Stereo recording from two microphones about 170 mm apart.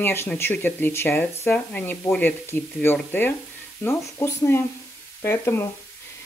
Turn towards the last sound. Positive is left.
turn(degrees=15)  # may be behind; listen again after turning